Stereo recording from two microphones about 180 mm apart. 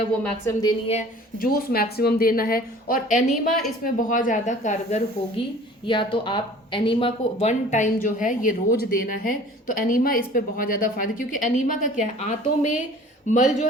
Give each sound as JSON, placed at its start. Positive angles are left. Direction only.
{"t": 1.4, "sound": "a woman's voice", "side_deg": 55}
{"t": 3.2, "sound": "a woman's voice", "side_deg": 0}
{"t": 3.8, "sound": "a woman's voice", "side_deg": 50}